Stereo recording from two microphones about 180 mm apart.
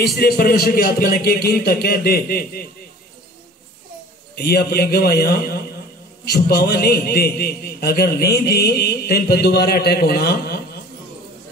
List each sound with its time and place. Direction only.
0.0 s a man's voice: 60° left (ahead or behind)
4.4 s a man's voice: 60° left (ahead or behind)